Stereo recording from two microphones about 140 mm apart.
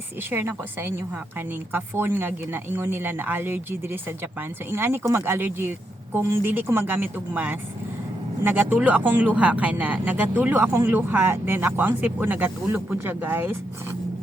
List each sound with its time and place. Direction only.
0.2 s a woman's voice: 15° right (ahead or behind)